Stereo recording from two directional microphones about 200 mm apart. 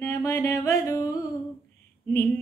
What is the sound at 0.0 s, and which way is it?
Music, 10° left (ahead or behind).